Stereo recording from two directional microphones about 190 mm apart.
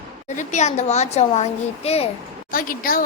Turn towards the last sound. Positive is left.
turn(degrees=50)  # may be behind; listen again after turning